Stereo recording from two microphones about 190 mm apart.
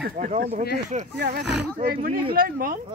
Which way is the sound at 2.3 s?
50° right (ahead or behind).